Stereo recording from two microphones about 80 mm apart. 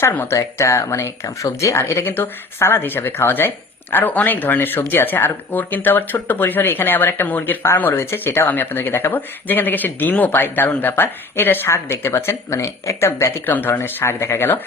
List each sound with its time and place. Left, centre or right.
0.0 s speech: left
13.4 s speech: left